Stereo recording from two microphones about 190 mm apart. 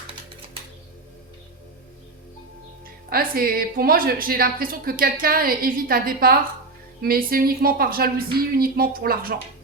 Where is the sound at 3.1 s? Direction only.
50° right (ahead or behind).